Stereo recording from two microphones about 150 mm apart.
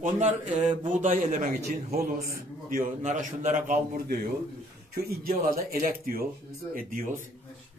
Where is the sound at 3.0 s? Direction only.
55° right (ahead or behind).